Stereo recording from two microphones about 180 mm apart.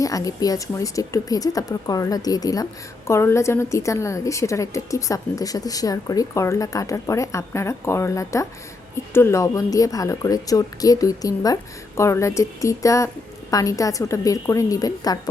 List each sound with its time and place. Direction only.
0.0 s a woman's voice: 20° left (ahead or behind)